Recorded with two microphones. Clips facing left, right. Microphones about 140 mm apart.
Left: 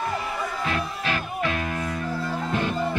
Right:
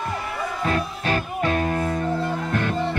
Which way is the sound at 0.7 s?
40° right (ahead or behind).